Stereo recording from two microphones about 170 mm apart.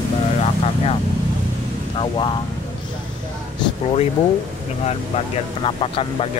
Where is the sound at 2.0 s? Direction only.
30° left (ahead or behind).